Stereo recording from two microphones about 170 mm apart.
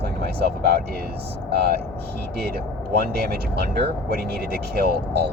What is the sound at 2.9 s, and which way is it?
Speech, 70° right (ahead or behind).